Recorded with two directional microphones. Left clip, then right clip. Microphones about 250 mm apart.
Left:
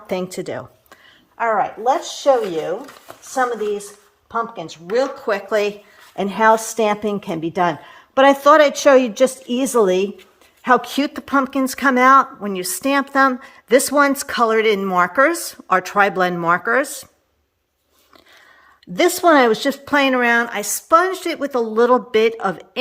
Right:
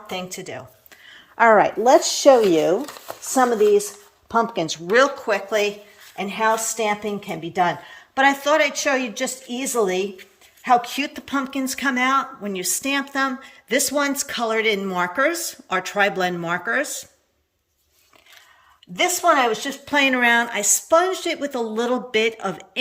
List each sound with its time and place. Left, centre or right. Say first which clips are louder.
0.1 s speech: left 6 dB; left
1.4 s speech: right 4 dB; right
4.3 s speech: right 3 dB; right
5.0 s a woman's voice: even; centre
19.1 s a woman's voice: left 4 dB; left
19.6 s speech: left 3 dB; centre